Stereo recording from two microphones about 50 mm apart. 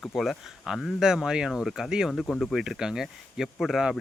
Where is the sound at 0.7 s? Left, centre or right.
Centre.